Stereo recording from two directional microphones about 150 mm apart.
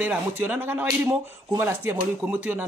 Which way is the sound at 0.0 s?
10° right (ahead or behind).